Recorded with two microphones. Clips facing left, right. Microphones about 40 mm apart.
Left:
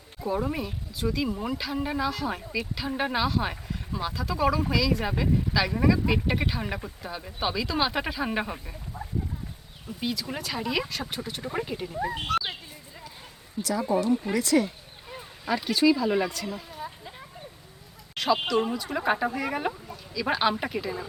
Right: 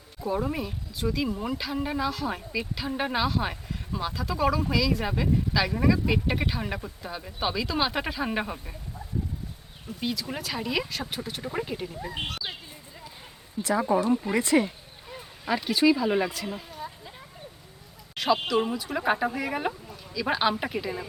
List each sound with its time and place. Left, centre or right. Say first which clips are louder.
0.3 s speech: even; centre
10.0 s speech: even; centre
13.6 s speech: right 2 dB; right
15.4 s speech: even; centre
18.4 s speech: even; centre